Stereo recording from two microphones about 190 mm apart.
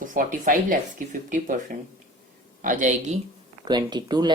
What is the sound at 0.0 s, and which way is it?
Speech, 45° right (ahead or behind).